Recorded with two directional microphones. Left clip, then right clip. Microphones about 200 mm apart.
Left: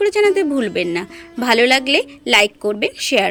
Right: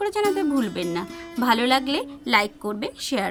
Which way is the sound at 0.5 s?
35° left (ahead or behind).